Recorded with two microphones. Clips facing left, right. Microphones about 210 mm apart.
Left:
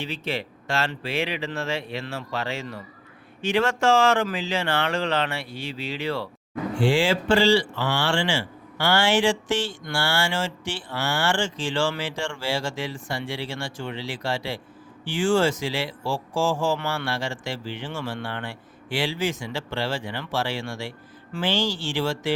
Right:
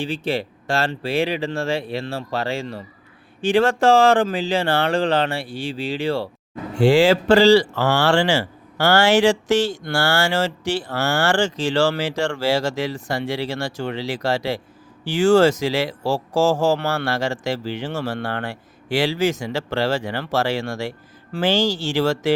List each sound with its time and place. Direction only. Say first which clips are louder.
0.0 s speech: right 6 dB; 35° right (ahead or behind)